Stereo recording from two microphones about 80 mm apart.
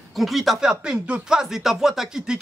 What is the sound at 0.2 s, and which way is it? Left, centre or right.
Speech, centre.